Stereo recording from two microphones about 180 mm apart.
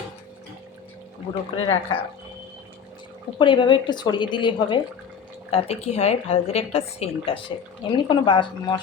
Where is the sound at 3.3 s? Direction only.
25° left (ahead or behind).